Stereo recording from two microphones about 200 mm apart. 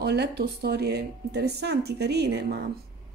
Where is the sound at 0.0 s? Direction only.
55° right (ahead or behind).